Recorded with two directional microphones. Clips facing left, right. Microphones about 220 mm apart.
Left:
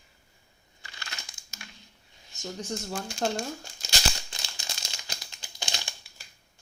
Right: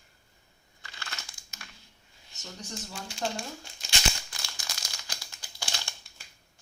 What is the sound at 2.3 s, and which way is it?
Speech, 50° left (ahead or behind).